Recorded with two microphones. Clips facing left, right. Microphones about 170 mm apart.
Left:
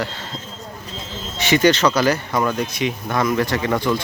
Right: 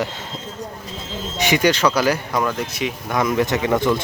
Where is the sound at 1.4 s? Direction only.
10° right (ahead or behind).